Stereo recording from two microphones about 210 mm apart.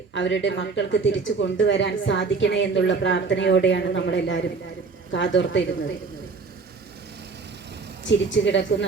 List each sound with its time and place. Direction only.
0.1 s speech: 60° left (ahead or behind)
8.0 s speech: 60° left (ahead or behind)